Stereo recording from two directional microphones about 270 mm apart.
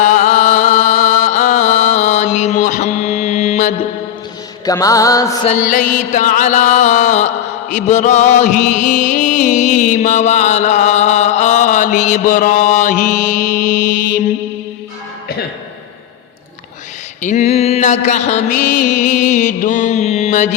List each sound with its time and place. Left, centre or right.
0.0 s music: left
4.6 s mantra: centre
5.5 s music: left
17.2 s mantra: left